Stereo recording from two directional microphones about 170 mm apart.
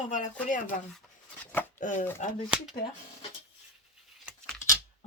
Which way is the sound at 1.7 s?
50° left (ahead or behind).